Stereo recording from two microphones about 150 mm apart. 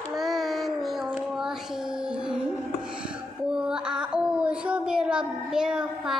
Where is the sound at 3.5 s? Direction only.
5° right (ahead or behind).